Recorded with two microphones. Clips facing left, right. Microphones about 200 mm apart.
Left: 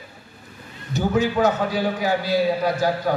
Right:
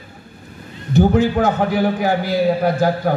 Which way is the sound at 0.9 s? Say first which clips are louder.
Right 6 dB; 55° right (ahead or behind).